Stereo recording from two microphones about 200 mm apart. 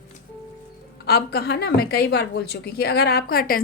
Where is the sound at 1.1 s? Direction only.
50° left (ahead or behind).